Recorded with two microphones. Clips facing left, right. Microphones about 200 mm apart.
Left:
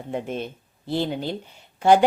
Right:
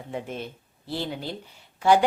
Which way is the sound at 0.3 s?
20° left (ahead or behind).